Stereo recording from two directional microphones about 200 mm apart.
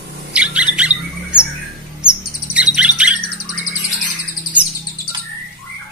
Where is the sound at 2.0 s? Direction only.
5° right (ahead or behind).